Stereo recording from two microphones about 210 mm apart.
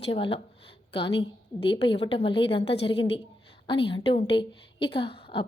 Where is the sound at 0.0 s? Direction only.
25° left (ahead or behind).